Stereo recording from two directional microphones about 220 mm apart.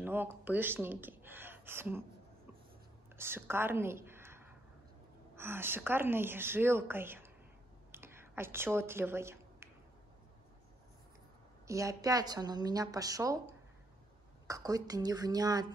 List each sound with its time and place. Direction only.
0.0 s speech: 10° right (ahead or behind)
3.2 s a woman's voice: 10° right (ahead or behind)
7.9 s a sound: 10° right (ahead or behind)
11.6 s a woman's voice: 15° right (ahead or behind)